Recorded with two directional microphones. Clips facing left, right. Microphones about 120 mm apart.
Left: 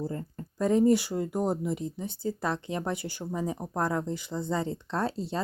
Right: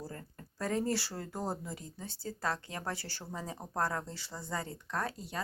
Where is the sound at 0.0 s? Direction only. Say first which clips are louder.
Left 11 dB; 25° left (ahead or behind).